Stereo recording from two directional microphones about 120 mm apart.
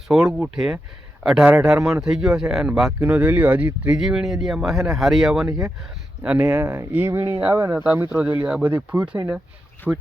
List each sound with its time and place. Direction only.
0.1 s speech: 5° right (ahead or behind)
3.0 s speech: 15° right (ahead or behind)
5.5 s speech: 25° right (ahead or behind)
6.2 s speech: 10° right (ahead or behind)